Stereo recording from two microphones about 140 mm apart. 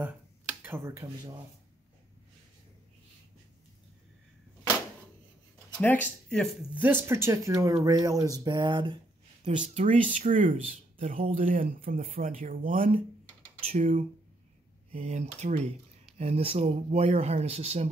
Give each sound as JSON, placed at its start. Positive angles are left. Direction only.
{"t": 0.0, "sound": "speech", "side_deg": -10}
{"t": 5.8, "sound": "speech", "side_deg": 10}
{"t": 6.7, "sound": "speech", "side_deg": -15}
{"t": 9.6, "sound": "speech", "side_deg": -60}
{"t": 11.3, "sound": "speech", "side_deg": -75}
{"t": 13.7, "sound": "speech", "side_deg": -60}